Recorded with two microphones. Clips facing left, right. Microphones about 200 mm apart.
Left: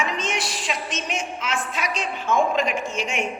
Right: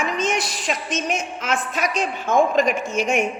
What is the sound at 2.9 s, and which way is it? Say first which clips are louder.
Music: right 6 dB; 45° right (ahead or behind).